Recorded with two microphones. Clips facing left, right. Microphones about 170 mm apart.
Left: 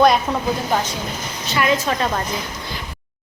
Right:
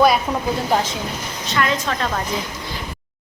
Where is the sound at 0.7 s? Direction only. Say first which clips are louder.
Right 4 dB; 25° right (ahead or behind).